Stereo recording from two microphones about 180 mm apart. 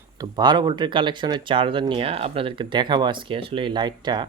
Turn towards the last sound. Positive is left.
turn(degrees=-25)  # may be behind; listen again after turning